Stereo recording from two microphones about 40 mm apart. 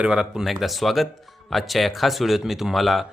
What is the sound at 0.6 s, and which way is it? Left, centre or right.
Speech, centre.